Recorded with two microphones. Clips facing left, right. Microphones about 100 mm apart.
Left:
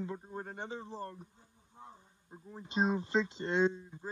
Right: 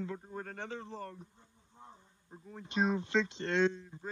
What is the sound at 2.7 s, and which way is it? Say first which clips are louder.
Speech: even; 35° left (ahead or behind).